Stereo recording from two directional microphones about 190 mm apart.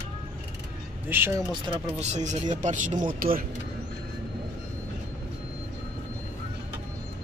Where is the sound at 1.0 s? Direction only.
10° right (ahead or behind).